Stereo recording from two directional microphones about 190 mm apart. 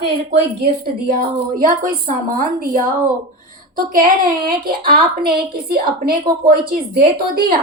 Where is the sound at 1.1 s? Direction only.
45° right (ahead or behind).